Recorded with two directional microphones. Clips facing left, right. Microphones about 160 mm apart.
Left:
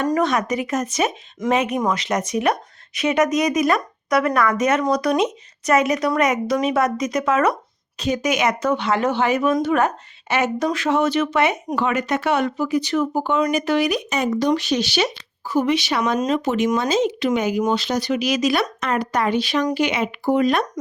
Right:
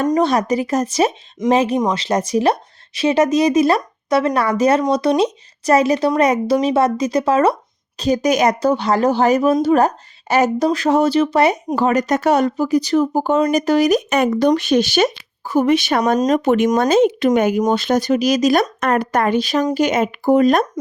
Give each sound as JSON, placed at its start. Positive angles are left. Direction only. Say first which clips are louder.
{"t": 0.1, "sound": "speech", "louder": "right 4 dB", "side_deg": -30}
{"t": 14.1, "sound": "speech", "louder": "right 5 dB", "side_deg": -55}
{"t": 16.4, "sound": "speech", "louder": "right 5 dB", "side_deg": -55}